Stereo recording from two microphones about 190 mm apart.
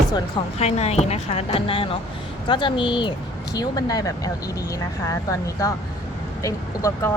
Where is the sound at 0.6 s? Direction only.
35° left (ahead or behind).